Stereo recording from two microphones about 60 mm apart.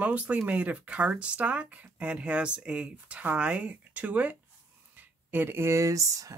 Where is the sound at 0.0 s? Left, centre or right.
Right.